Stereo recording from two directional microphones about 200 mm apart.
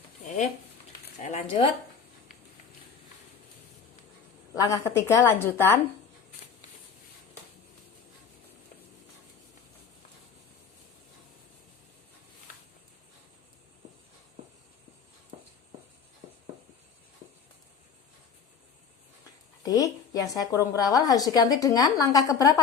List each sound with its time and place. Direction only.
1.2 s speech: 30° left (ahead or behind)
4.5 s a woman's voice: 15° left (ahead or behind)
19.6 s a woman's voice: 15° left (ahead or behind)